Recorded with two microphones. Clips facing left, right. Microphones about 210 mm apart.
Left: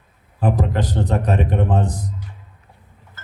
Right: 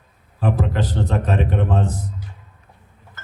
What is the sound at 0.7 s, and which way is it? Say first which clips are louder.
A man's voice: left 1 dB; 15° left (ahead or behind).